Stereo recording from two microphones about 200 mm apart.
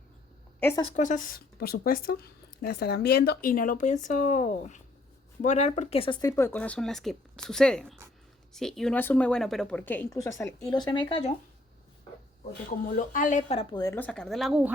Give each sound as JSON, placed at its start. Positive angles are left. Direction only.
{"t": 0.9, "sound": "a woman's voice", "side_deg": 40}
{"t": 12.8, "sound": "speech", "side_deg": 40}
{"t": 13.7, "sound": "a woman's voice", "side_deg": 15}